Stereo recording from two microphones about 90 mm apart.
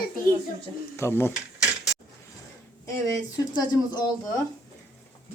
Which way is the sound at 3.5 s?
50° left (ahead or behind).